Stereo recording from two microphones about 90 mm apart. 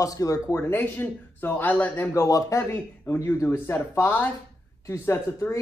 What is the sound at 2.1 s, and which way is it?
Speech, 35° left (ahead or behind).